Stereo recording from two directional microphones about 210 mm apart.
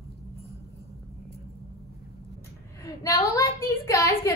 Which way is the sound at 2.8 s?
15° left (ahead or behind).